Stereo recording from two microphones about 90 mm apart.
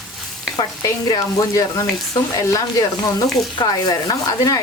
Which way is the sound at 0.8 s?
40° left (ahead or behind).